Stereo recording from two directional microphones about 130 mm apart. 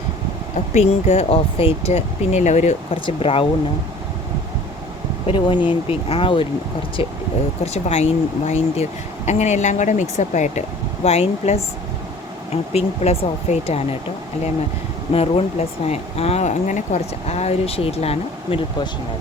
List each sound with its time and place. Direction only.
0.5 s speech: 60° left (ahead or behind)
2.9 s speech: 45° left (ahead or behind)
5.2 s speech: 40° left (ahead or behind)
7.6 s speech: 55° left (ahead or behind)
11.0 s speech: 55° left (ahead or behind)
15.1 s speech: 50° left (ahead or behind)